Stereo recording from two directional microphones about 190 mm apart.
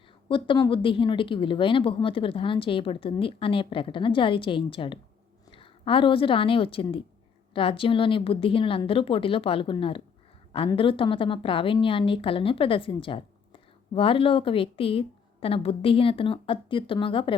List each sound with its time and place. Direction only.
0.3 s a woman's voice: 25° left (ahead or behind)